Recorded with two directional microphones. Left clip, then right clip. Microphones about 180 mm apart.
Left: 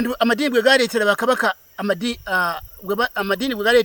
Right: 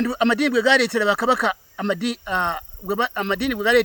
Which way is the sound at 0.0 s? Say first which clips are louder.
Left 1 dB; 30° left (ahead or behind).